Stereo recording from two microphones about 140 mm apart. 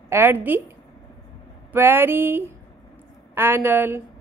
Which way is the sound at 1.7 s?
15° right (ahead or behind).